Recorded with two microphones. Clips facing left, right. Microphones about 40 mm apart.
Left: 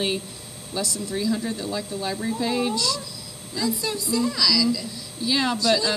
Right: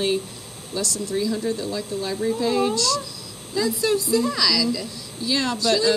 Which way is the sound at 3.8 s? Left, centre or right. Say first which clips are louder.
Right 6 dB; right.